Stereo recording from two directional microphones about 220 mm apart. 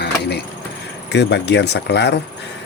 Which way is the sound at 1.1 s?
50° left (ahead or behind).